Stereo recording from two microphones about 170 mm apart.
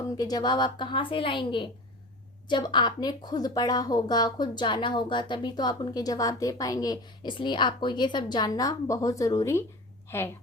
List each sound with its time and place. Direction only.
0.0 s a woman's voice: 20° left (ahead or behind)